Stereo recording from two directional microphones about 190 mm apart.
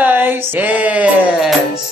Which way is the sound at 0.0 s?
10° right (ahead or behind).